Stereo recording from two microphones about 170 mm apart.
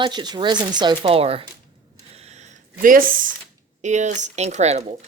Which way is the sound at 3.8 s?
45° right (ahead or behind).